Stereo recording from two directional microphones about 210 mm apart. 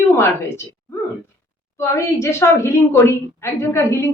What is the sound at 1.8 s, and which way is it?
A woman's voice, 15° left (ahead or behind).